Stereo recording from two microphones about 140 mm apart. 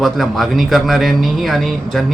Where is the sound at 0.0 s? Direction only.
Centre (ahead or behind).